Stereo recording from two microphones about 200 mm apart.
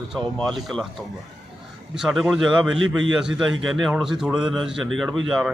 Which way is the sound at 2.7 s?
80° right.